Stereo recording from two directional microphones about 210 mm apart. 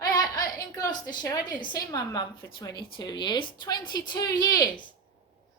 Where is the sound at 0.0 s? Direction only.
20° left (ahead or behind).